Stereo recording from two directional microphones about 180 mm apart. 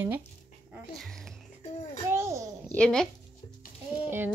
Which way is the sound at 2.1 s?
15° right (ahead or behind).